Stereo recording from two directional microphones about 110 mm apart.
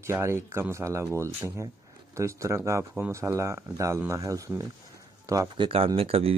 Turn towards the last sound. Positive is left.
turn(degrees=-60)  # may be behind; listen again after turning